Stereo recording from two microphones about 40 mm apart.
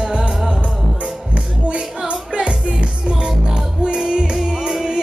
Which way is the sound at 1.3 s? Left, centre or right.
Right.